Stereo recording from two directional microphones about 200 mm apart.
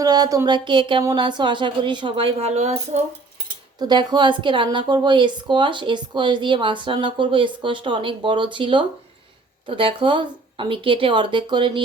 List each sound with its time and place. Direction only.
0.0 s a woman's voice: 20° right (ahead or behind)
3.8 s a woman's voice: 20° right (ahead or behind)